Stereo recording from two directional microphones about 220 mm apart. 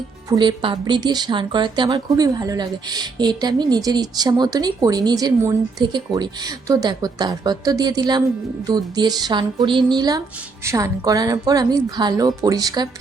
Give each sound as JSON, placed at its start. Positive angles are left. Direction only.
{"t": 0.3, "sound": "a woman's voice", "side_deg": -20}